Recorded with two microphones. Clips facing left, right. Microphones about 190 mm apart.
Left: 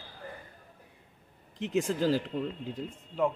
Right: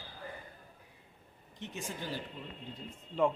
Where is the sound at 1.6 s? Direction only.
90° left.